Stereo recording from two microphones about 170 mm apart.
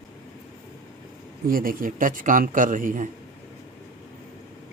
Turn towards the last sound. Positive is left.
turn(degrees=-50)  # may be behind; listen again after turning